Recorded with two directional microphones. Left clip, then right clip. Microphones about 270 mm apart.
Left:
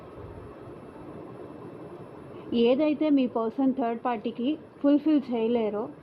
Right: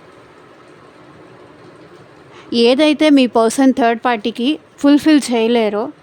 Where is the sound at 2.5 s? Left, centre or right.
Right.